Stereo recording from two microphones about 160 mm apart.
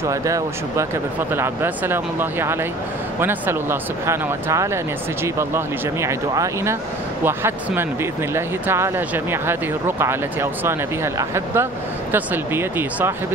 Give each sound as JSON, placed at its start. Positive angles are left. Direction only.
{"t": 0.1, "sound": "speech", "side_deg": -20}